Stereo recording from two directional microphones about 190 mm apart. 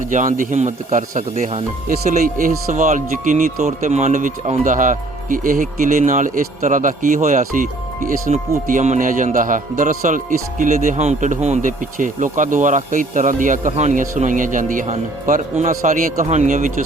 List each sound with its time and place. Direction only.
0.1 s speech: 45° right (ahead or behind)